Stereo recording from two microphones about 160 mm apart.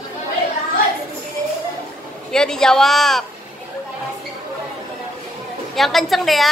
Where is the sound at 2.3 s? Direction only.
5° left (ahead or behind).